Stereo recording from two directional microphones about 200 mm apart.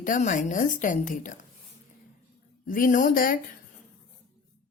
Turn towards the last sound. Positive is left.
turn(degrees=45)  # may be behind; listen again after turning